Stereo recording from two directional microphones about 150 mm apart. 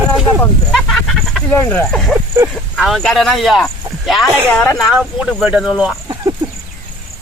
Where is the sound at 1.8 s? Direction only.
5° left (ahead or behind).